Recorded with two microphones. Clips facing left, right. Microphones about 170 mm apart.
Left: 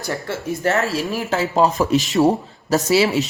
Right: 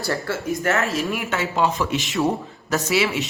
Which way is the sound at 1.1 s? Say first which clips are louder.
Left 4 dB; 35° left (ahead or behind).